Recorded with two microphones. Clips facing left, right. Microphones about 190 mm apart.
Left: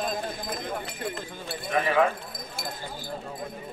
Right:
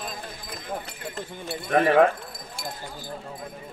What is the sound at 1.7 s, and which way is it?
Speech, 55° right (ahead or behind).